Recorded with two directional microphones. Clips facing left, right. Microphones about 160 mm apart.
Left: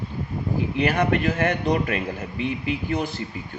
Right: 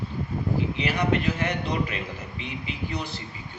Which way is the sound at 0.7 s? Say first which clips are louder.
Left 6 dB; 50° left (ahead or behind).